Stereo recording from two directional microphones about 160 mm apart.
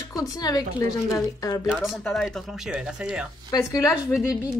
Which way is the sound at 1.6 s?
5° right (ahead or behind).